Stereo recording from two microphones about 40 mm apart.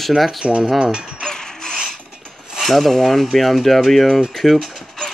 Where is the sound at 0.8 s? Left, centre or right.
Right.